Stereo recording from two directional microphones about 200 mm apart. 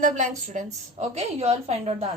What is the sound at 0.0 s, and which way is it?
A woman's voice, 40° right (ahead or behind).